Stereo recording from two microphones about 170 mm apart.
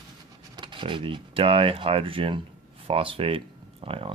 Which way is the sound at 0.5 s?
30° right (ahead or behind).